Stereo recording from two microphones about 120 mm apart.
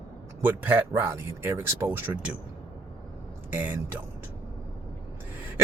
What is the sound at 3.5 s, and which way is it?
Speech, 15° right (ahead or behind).